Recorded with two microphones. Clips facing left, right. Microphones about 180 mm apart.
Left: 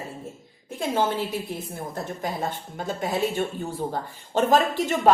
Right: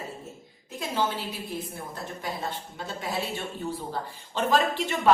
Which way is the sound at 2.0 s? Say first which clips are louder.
Left 6 dB; 50° left (ahead or behind).